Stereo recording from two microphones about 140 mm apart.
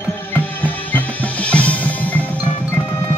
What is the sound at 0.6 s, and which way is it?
Music, 10° left (ahead or behind).